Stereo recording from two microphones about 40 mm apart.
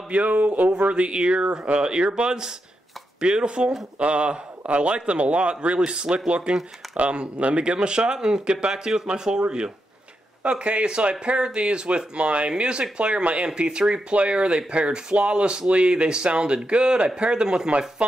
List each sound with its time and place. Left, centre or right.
0.1 s a man's voice: right